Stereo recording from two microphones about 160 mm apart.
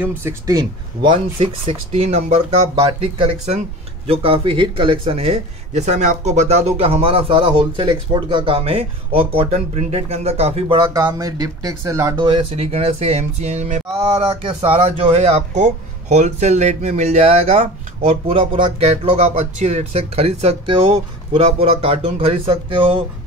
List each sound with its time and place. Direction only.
0.0 s speech: 15° right (ahead or behind); by 10.9 s 35° right (ahead or behind)
10.9 s speech: 20° right (ahead or behind)
12.3 s speech: 35° right (ahead or behind)